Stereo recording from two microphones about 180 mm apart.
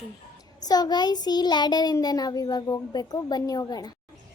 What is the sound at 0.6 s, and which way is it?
Child singing, 20° left (ahead or behind).